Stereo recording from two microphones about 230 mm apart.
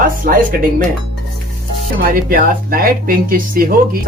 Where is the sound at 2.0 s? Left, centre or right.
Right.